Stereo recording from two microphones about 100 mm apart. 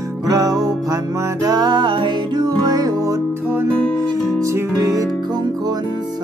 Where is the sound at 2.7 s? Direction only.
40° right (ahead or behind).